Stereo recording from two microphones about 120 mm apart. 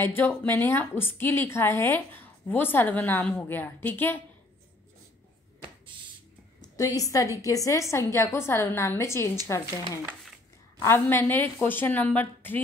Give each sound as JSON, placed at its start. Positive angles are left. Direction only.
{"t": 0.0, "sound": "a woman's voice", "side_deg": 15}
{"t": 6.8, "sound": "a woman's voice", "side_deg": 30}
{"t": 10.8, "sound": "a woman's voice", "side_deg": 20}